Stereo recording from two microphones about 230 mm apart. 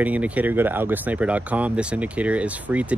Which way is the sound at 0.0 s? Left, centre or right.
Centre.